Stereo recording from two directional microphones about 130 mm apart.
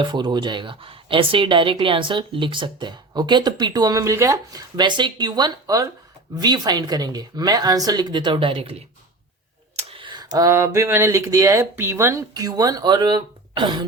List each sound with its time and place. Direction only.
0.0 s a woman's voice: 35° right (ahead or behind)
9.7 s speech: 40° right (ahead or behind)